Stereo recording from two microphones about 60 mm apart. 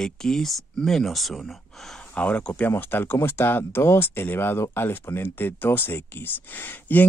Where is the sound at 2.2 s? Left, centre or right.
Left.